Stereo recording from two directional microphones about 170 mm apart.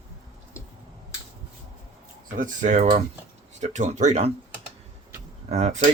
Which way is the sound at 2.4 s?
45° right (ahead or behind).